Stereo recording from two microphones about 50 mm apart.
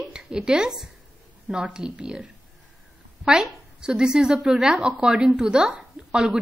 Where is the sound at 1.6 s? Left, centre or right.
Right.